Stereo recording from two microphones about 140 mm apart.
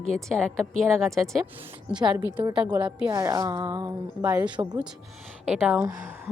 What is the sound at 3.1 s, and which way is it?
A woman's voice, 25° right (ahead or behind).